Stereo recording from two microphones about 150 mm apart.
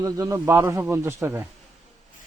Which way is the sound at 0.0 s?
25° right (ahead or behind).